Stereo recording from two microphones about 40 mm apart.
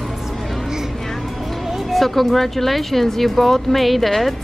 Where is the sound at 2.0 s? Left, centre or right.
Centre.